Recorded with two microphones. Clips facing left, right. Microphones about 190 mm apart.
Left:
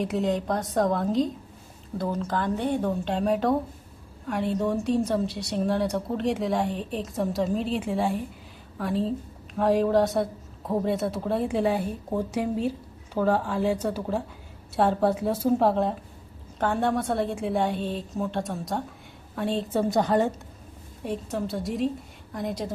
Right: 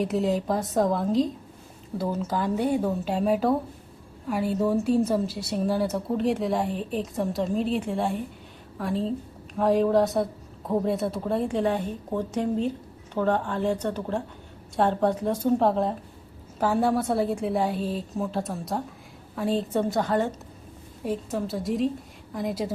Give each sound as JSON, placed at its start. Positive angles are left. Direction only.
{"t": 0.0, "sound": "a woman's voice", "side_deg": 0}
{"t": 19.9, "sound": "a woman's voice", "side_deg": 20}
{"t": 21.0, "sound": "a woman's voice", "side_deg": 0}